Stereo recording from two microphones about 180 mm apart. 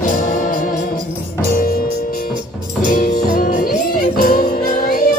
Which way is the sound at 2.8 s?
45° left (ahead or behind).